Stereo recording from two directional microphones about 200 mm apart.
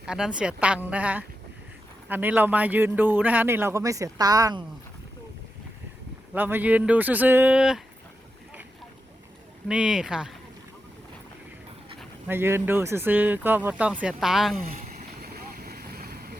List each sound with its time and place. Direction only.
0.0 s a woman's voice: 5° right (ahead or behind)
6.3 s a man's voice: 10° right (ahead or behind)
9.6 s a woman's voice: 5° right (ahead or behind)
12.3 s a man's voice: 10° right (ahead or behind)
14.8 s vehicle: 45° right (ahead or behind)